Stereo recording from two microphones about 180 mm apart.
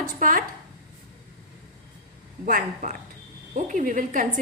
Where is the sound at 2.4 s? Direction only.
45° right (ahead or behind).